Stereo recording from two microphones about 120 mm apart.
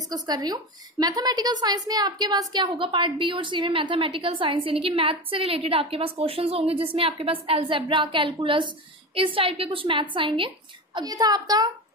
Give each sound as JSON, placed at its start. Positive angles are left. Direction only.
{"t": 0.1, "sound": "a woman's voice", "side_deg": -35}
{"t": 11.0, "sound": "a child's voice", "side_deg": -35}